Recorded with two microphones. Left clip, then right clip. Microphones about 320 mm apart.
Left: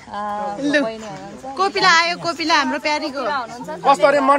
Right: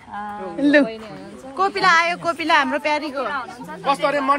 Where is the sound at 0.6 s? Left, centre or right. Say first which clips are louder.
Right 4 dB; right.